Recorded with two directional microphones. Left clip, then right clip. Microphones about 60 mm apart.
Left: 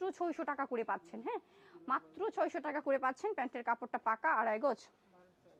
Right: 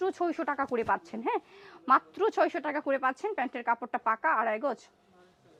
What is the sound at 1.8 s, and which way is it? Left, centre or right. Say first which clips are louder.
Speech: right 12 dB; right.